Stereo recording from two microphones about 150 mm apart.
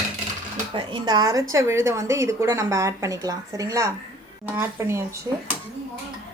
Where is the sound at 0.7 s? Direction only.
30° right (ahead or behind).